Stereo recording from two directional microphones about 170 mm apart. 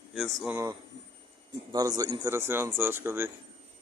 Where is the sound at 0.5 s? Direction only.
20° right (ahead or behind).